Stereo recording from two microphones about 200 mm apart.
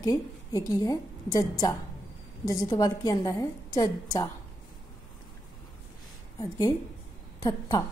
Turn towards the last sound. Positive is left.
turn(degrees=20)  # may be behind; listen again after turning